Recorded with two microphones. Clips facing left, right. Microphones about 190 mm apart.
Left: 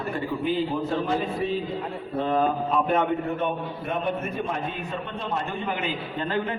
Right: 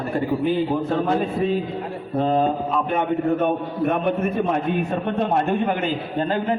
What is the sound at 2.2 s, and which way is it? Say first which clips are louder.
Speech: right 4 dB; 30° right (ahead or behind).